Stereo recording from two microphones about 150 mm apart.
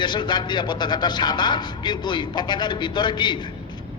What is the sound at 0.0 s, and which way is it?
A man's voice, 30° left (ahead or behind).